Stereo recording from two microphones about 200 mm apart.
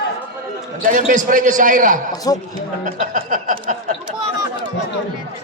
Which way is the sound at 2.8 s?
40° right (ahead or behind).